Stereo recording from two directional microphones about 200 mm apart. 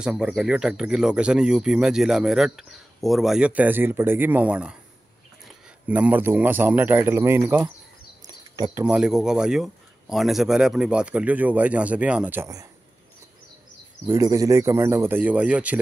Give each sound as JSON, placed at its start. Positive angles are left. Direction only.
{"t": 0.0, "sound": "speech", "side_deg": 0}
{"t": 5.9, "sound": "speech", "side_deg": -5}
{"t": 8.8, "sound": "speech", "side_deg": -5}
{"t": 14.0, "sound": "speech", "side_deg": -15}